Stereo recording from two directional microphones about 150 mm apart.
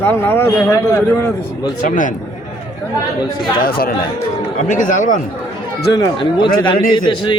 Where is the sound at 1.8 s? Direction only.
60° left (ahead or behind).